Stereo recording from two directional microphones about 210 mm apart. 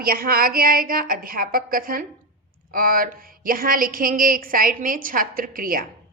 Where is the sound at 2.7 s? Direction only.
40° right (ahead or behind).